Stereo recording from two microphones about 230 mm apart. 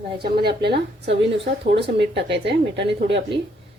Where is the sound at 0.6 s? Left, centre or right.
Right.